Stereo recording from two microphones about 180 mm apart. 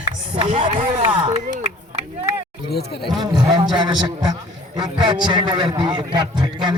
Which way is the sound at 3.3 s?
25° right (ahead or behind).